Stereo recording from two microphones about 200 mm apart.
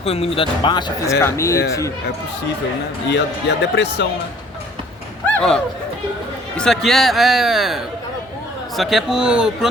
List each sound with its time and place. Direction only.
0.0 s a man's voice: 30° left (ahead or behind)
3.1 s speech: 60° left (ahead or behind)
5.3 s speech: 5° left (ahead or behind)